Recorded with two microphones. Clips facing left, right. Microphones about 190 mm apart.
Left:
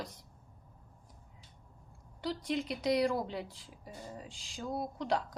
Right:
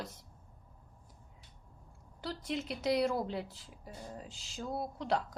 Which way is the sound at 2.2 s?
Centre (ahead or behind).